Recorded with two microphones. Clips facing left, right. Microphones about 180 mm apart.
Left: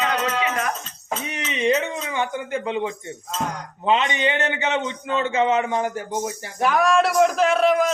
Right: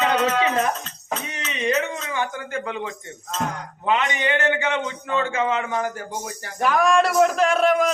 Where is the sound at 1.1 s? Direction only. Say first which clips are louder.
Left 2 dB; 15° left (ahead or behind).